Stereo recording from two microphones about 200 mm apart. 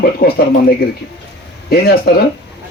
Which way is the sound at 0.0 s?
50° left (ahead or behind).